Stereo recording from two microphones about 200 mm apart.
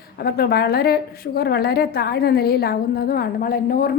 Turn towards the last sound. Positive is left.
turn(degrees=45)  # may be behind; listen again after turning